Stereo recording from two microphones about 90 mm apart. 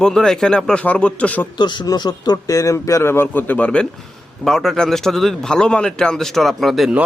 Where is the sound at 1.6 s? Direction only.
60° left (ahead or behind).